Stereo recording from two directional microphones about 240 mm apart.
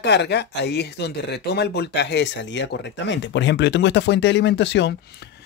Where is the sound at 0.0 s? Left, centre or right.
Left.